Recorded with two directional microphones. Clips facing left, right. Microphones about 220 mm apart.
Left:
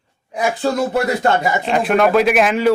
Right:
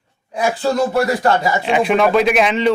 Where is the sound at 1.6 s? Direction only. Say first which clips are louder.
Even; centre (ahead or behind).